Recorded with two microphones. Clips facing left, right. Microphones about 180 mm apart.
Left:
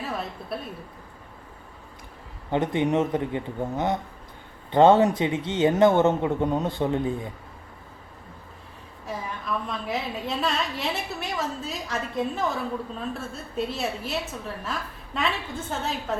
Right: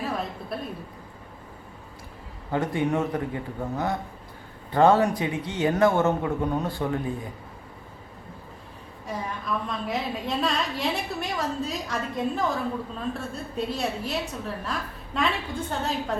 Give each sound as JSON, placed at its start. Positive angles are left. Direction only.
{"t": 0.0, "sound": "a sound", "side_deg": 0}
{"t": 2.5, "sound": "speech", "side_deg": 20}
{"t": 9.0, "sound": "a woman's voice", "side_deg": 0}